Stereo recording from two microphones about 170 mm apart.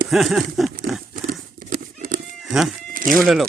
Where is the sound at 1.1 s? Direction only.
55° right (ahead or behind).